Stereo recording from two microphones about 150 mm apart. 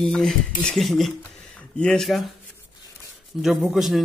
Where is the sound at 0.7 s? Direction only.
Centre (ahead or behind).